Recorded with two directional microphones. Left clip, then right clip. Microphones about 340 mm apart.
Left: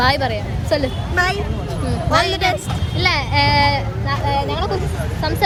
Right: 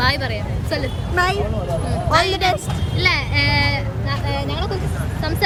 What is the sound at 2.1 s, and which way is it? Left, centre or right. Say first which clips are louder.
Speech: even; centre.